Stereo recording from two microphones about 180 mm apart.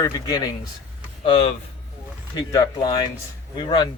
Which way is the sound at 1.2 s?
30° left (ahead or behind).